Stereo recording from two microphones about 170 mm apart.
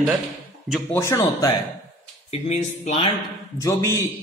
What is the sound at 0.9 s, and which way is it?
Speech, 15° left (ahead or behind).